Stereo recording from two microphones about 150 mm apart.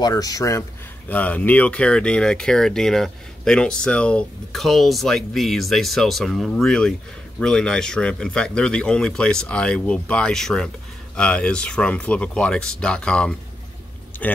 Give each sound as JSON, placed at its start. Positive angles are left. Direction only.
{"t": 0.0, "sound": "speech", "side_deg": 25}
{"t": 1.1, "sound": "speech", "side_deg": 10}